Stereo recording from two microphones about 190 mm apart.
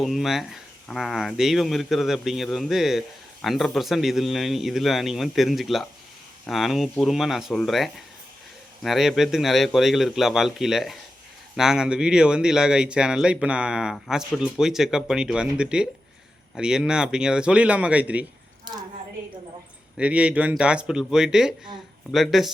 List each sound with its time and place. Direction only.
0.0 s speech: centre (ahead or behind)
18.6 s a sound: 20° right (ahead or behind)
20.0 s speech: 5° right (ahead or behind)